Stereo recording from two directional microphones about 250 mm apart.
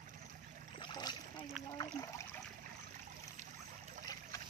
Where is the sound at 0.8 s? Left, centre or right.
Centre.